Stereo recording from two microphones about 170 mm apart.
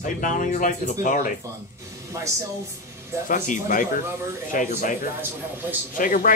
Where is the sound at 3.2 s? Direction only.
50° left (ahead or behind).